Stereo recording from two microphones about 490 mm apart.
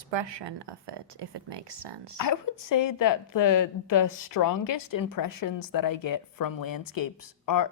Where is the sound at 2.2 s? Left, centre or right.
Left.